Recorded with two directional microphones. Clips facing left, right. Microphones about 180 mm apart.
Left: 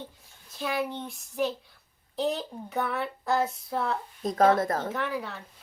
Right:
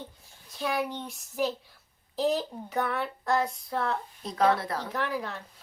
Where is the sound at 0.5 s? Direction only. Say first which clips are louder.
Even; centre (ahead or behind).